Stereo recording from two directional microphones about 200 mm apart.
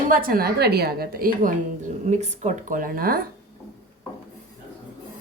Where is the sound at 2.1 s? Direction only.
35° right (ahead or behind).